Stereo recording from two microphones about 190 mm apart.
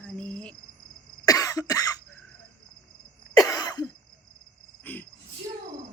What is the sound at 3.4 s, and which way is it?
Cough, 20° left (ahead or behind).